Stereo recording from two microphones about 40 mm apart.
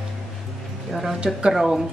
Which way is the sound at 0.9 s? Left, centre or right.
Centre.